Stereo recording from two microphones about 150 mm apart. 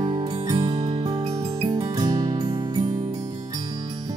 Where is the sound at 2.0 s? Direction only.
30° right (ahead or behind).